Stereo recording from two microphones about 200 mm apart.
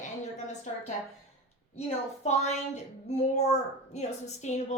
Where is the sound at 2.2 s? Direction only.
35° left (ahead or behind).